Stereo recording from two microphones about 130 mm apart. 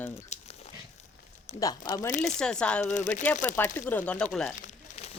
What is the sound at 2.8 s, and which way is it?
Speech, 70° left (ahead or behind).